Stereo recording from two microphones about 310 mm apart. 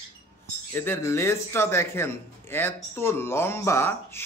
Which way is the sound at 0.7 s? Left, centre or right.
Centre.